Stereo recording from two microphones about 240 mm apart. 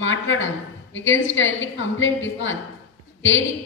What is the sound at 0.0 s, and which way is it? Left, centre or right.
A woman's voice, left.